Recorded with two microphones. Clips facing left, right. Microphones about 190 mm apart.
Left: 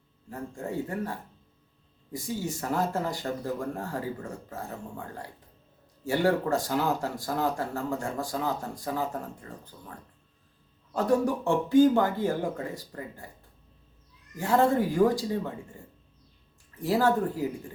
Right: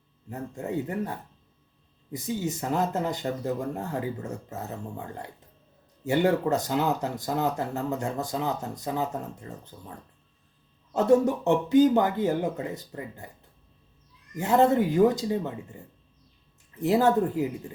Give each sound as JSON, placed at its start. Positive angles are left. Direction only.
{"t": 0.3, "sound": "speech", "side_deg": -20}
{"t": 10.9, "sound": "speech", "side_deg": -25}
{"t": 14.3, "sound": "speech", "side_deg": -20}
{"t": 16.8, "sound": "speech", "side_deg": -20}